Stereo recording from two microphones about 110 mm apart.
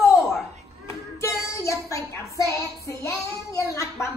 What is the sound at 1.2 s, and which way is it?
Child singing, 30° left (ahead or behind).